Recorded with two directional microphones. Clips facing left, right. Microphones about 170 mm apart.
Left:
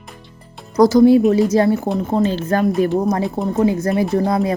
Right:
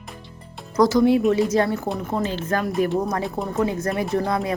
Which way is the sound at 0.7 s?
35° left (ahead or behind).